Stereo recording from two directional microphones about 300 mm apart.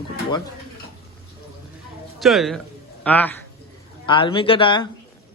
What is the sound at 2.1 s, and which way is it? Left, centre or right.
A man's voice, centre.